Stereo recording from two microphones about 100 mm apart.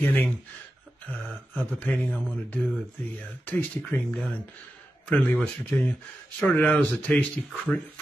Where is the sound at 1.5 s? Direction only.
15° left (ahead or behind).